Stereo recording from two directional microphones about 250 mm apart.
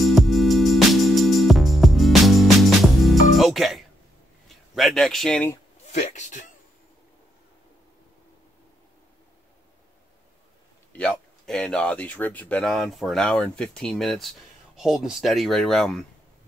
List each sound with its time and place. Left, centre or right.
0.0 s music: centre
4.7 s speech: centre
5.9 s a man's voice: left
10.9 s speech: centre